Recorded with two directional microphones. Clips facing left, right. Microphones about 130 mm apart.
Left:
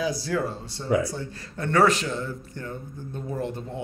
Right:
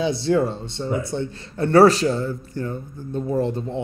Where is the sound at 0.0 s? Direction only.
25° right (ahead or behind).